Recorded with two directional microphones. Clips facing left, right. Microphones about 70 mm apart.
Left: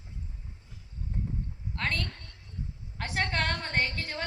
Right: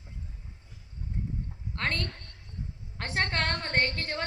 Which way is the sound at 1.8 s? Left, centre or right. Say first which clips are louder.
Right 1 dB; right.